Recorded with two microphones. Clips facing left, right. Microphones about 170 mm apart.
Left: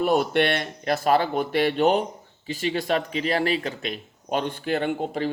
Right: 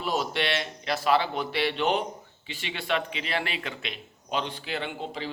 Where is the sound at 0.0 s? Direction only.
55° left (ahead or behind).